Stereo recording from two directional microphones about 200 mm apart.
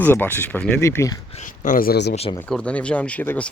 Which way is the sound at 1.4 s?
40° left (ahead or behind).